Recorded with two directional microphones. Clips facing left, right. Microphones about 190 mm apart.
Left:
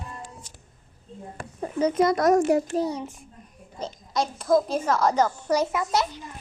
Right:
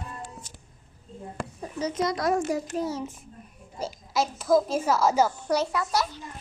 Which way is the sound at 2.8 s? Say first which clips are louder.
Left 2 dB; centre (ahead or behind).